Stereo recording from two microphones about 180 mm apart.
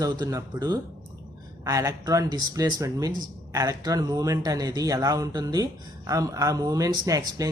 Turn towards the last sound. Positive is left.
turn(degrees=-20)  # may be behind; listen again after turning